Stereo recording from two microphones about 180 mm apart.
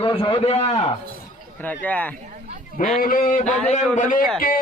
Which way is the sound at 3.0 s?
50° left (ahead or behind).